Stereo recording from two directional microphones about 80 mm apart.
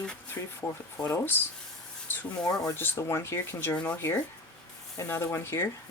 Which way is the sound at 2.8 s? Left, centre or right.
Left.